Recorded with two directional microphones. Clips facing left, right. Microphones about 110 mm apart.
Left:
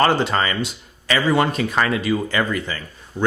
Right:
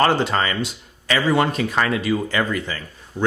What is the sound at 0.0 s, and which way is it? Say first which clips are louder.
Speech: even; 20° left (ahead or behind).